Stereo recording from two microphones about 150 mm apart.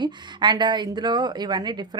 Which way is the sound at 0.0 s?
30° right (ahead or behind).